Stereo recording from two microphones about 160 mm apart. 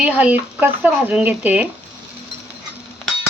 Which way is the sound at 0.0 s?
10° right (ahead or behind).